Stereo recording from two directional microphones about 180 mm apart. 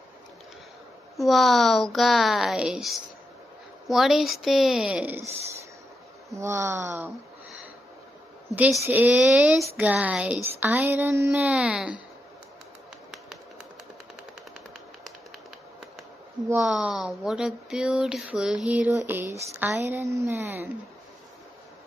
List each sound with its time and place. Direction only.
1.1 s speech: centre (ahead or behind)
6.3 s speech: 15° right (ahead or behind)
8.8 s speech: 10° right (ahead or behind)
16.4 s speech: 5° right (ahead or behind)